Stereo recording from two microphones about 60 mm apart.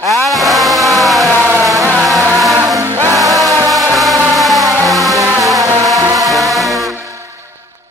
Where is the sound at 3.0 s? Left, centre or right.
Right.